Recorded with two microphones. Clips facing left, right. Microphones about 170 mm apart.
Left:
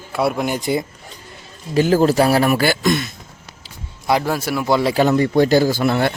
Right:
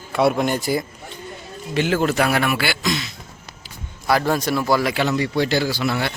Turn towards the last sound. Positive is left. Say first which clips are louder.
# left 5 dB
turn(degrees=50)  # may be behind; listen again after turning